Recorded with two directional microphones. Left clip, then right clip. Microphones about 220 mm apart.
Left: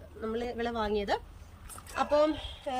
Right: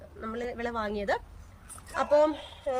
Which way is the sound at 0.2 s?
15° right (ahead or behind).